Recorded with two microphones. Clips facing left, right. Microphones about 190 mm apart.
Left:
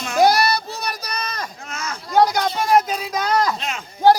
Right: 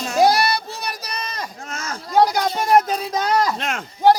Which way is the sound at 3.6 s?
55° right (ahead or behind).